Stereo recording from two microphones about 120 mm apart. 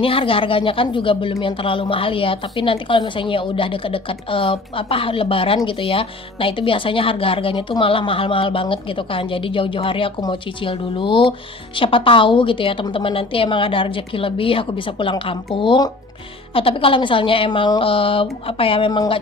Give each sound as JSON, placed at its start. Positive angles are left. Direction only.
{"t": 0.0, "sound": "speech", "side_deg": 50}